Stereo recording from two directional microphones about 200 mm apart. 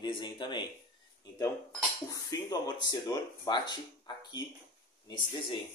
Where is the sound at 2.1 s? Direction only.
20° left (ahead or behind).